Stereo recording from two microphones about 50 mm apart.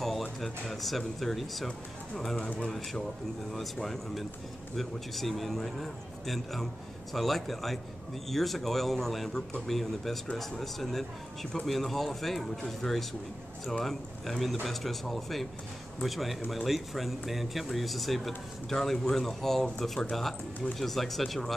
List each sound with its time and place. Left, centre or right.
0.0 s speech: centre
2.3 s speech: left
2.6 s speech: centre